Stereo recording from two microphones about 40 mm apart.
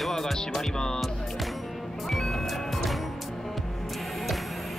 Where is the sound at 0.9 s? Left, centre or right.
Centre.